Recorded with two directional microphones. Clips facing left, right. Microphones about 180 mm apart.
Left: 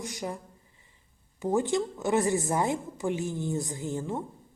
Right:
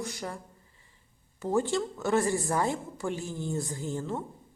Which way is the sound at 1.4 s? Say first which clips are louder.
Left 1 dB; 20° left (ahead or behind).